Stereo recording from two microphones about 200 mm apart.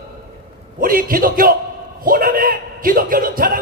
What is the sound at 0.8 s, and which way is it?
A man's voice, 45° right (ahead or behind).